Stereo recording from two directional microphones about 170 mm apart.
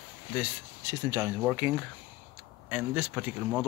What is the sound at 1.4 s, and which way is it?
Speech, 10° right (ahead or behind).